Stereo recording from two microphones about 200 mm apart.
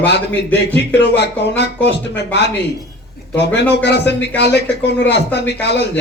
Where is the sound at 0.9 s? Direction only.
60° left (ahead or behind).